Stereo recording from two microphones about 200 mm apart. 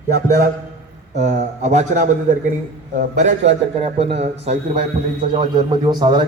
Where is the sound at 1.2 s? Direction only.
35° right (ahead or behind).